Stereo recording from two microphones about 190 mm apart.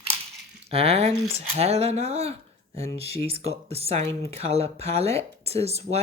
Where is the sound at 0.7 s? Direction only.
30° right (ahead or behind).